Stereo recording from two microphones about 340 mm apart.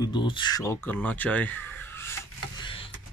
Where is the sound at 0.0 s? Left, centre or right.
Centre.